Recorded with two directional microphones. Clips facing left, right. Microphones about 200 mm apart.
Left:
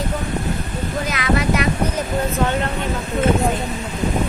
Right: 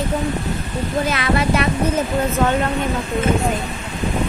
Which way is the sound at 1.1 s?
30° right (ahead or behind).